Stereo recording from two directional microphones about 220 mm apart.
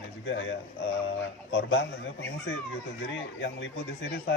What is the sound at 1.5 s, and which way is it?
Speech, 50° left (ahead or behind).